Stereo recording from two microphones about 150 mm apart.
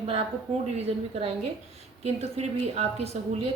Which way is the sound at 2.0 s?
45° right (ahead or behind).